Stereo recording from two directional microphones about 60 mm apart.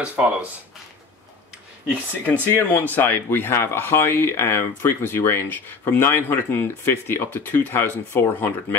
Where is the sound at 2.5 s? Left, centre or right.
Left.